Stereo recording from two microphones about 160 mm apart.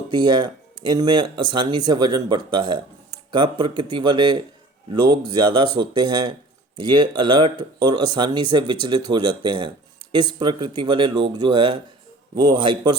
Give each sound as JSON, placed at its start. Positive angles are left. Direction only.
{"t": 0.1, "sound": "speech", "side_deg": -30}